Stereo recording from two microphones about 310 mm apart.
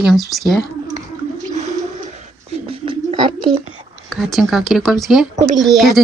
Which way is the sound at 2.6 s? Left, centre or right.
Centre.